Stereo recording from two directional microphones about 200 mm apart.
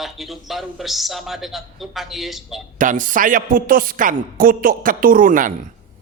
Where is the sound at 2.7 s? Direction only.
40° right (ahead or behind).